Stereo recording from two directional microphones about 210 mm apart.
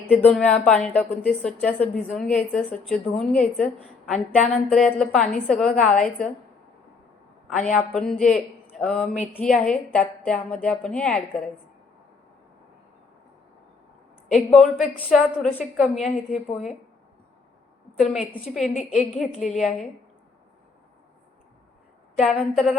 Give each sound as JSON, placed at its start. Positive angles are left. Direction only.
{"t": 0.1, "sound": "a woman's voice", "side_deg": 5}
{"t": 7.7, "sound": "a woman's voice", "side_deg": 5}
{"t": 14.3, "sound": "a woman's voice", "side_deg": 0}
{"t": 17.9, "sound": "a woman's voice", "side_deg": 0}
{"t": 18.2, "sound": "a woman's voice", "side_deg": 30}
{"t": 19.2, "sound": "a woman's voice", "side_deg": 0}
{"t": 22.2, "sound": "a woman's voice", "side_deg": 5}